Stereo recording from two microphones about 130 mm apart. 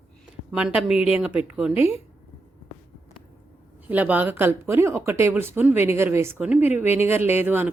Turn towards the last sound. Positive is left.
turn(degrees=-15)  # may be behind; listen again after turning